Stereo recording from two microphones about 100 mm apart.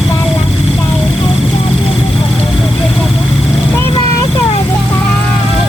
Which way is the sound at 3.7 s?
25° left (ahead or behind).